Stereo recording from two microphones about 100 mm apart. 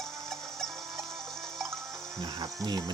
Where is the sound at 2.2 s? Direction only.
40° right (ahead or behind).